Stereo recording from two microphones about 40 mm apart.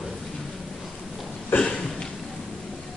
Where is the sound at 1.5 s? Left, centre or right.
Left.